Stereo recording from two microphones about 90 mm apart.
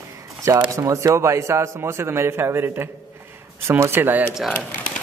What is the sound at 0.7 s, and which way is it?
A man's voice, 35° right (ahead or behind).